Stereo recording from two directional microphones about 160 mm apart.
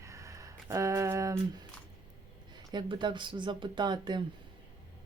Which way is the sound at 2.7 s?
30° right (ahead or behind).